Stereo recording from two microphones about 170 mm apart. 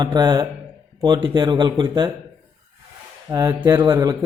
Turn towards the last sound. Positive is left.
turn(degrees=-20)  # may be behind; listen again after turning